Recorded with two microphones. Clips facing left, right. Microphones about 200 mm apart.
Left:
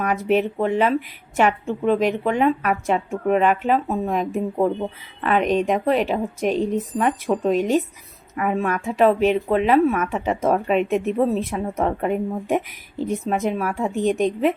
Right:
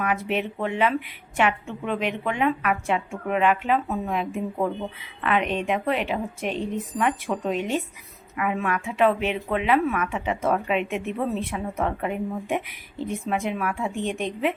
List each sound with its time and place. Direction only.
0.0 s speech: 40° left (ahead or behind)